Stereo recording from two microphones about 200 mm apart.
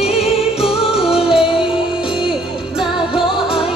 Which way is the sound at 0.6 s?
5° right (ahead or behind).